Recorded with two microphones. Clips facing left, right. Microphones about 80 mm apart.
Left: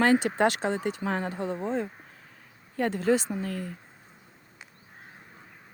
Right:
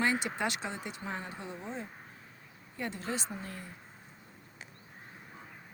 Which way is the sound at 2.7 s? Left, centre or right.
Left.